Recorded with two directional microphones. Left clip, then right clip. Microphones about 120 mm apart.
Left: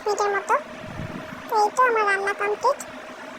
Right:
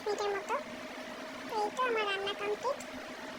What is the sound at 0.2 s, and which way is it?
Speech, 25° left (ahead or behind).